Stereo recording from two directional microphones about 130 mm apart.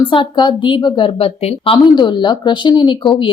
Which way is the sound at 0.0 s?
40° left (ahead or behind).